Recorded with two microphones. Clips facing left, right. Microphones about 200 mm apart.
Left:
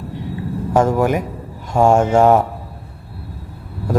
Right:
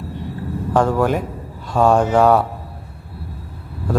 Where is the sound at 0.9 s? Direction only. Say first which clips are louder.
Left 1 dB; 10° left (ahead or behind).